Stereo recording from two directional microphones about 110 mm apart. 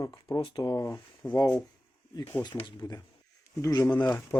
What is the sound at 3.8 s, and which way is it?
Speech, 15° left (ahead or behind).